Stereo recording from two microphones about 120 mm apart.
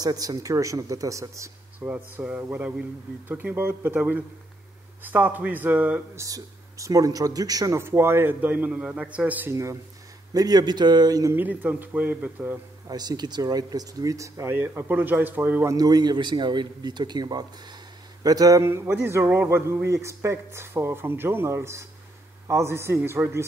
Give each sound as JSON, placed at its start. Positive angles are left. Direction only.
{"t": 0.0, "sound": "speech", "side_deg": -30}
{"t": 2.1, "sound": "speech", "side_deg": -15}
{"t": 6.1, "sound": "speech", "side_deg": -30}
{"t": 10.3, "sound": "a man's voice", "side_deg": -35}
{"t": 11.3, "sound": "speech", "side_deg": -15}
{"t": 12.8, "sound": "speech", "side_deg": -35}
{"t": 15.7, "sound": "a man's voice", "side_deg": -30}